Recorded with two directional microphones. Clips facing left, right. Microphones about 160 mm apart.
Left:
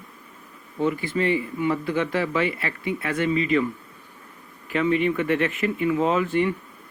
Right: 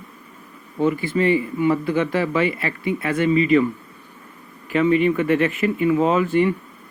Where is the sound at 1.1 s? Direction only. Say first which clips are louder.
Right 4 dB; 15° right (ahead or behind).